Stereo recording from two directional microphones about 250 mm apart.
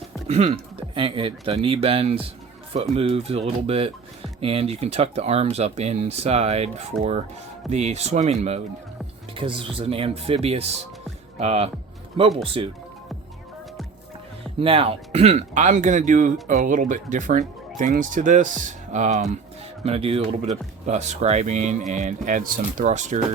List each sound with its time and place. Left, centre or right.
0.3 s speech: right
14.6 s speech: right